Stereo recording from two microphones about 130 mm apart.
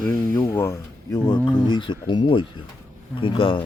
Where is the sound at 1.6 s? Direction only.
35° left (ahead or behind).